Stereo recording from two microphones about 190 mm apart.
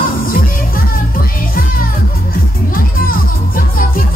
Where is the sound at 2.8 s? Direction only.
50° left (ahead or behind).